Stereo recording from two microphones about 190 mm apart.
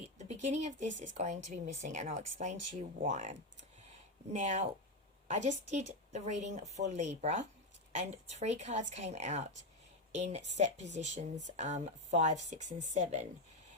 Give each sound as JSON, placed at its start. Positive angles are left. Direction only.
{"t": 0.4, "sound": "speech", "side_deg": -35}